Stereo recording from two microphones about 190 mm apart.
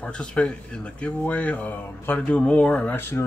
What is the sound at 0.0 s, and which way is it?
Speech, 5° left (ahead or behind).